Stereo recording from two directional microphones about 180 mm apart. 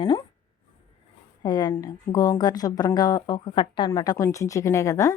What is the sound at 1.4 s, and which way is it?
A woman's voice, 25° left (ahead or behind).